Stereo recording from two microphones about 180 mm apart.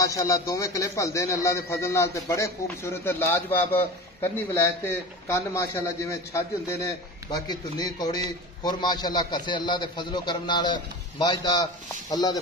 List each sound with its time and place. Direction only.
0.0 s a man's voice: 20° left (ahead or behind)